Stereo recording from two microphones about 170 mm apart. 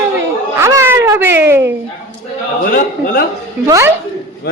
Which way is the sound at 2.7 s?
55° left (ahead or behind).